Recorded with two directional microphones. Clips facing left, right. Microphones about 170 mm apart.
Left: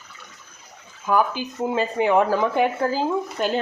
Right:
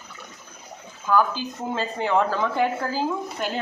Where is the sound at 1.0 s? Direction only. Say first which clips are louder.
Even; 15° left (ahead or behind).